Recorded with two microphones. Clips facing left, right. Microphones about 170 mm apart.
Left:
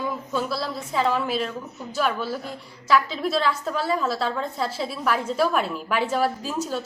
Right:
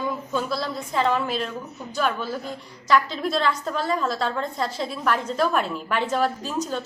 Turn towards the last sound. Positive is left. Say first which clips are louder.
# even
turn(degrees=5)  # may be behind; listen again after turning